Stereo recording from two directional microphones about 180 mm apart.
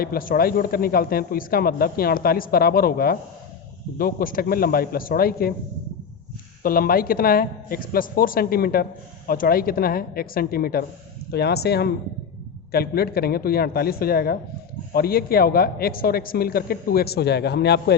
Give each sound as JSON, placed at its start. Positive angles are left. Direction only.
{"t": 0.0, "sound": "a woman's voice", "side_deg": 55}
{"t": 6.6, "sound": "a woman's voice", "side_deg": 55}